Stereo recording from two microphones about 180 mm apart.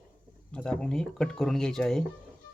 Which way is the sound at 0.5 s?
5° left (ahead or behind).